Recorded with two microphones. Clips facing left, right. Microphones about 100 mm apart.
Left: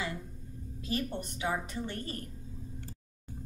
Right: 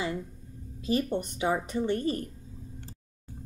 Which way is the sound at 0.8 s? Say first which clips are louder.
Right 7 dB; 20° right (ahead or behind).